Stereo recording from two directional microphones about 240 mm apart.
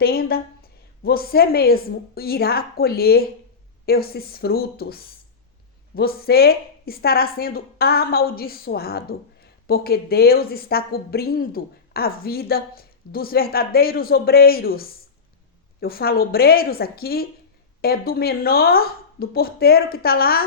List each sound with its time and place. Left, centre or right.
0.0 s speech: left